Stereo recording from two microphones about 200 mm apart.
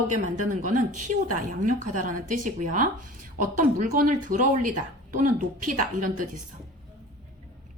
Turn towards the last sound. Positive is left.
turn(degrees=-40)  # may be behind; listen again after turning